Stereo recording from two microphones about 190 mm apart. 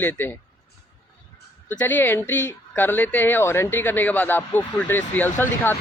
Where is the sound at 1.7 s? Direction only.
10° left (ahead or behind).